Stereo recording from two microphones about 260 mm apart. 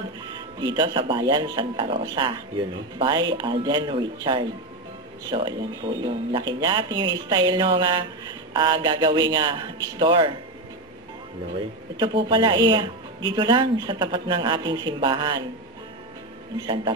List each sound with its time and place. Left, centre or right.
0.6 s speech: centre
12.0 s speech: centre
16.5 s speech: centre